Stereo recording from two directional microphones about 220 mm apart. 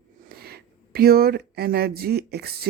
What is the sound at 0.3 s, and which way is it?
A woman's voice, 45° right (ahead or behind).